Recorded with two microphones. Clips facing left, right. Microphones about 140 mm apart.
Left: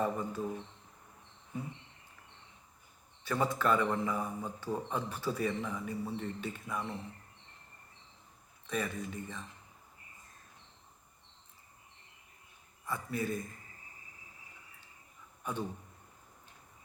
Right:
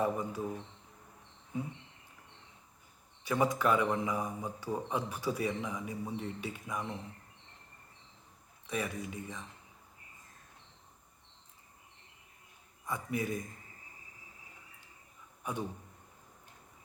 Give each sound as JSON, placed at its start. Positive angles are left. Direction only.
{"t": 0.0, "sound": "a man's voice", "side_deg": -10}
{"t": 3.2, "sound": "a man's voice", "side_deg": -15}
{"t": 8.6, "sound": "a man's voice", "side_deg": -10}
{"t": 12.8, "sound": "a man's voice", "side_deg": -15}